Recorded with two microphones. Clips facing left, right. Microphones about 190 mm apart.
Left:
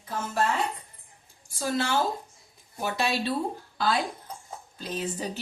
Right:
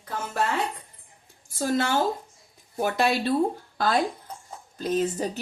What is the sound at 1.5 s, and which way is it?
Female singing, 45° right (ahead or behind).